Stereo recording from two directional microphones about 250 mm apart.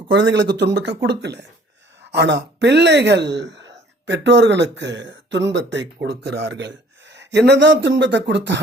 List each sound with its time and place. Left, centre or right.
0.1 s speech: right